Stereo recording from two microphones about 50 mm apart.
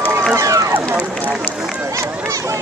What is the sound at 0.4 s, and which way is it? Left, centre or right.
Run, right.